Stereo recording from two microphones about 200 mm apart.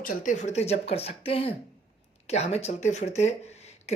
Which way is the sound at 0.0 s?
40° left (ahead or behind).